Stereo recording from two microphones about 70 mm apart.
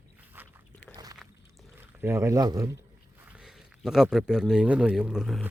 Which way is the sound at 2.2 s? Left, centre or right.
Right.